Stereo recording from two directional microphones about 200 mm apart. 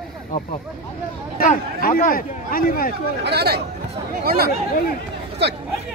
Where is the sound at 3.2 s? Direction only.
55° right (ahead or behind).